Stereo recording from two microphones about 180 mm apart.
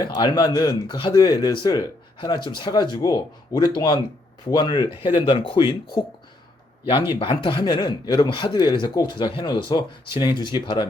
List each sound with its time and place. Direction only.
0.0 s speech: 25° left (ahead or behind)
6.8 s speech: 25° left (ahead or behind)